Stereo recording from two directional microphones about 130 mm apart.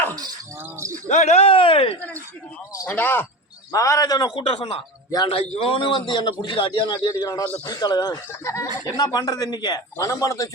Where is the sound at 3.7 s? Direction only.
25° left (ahead or behind).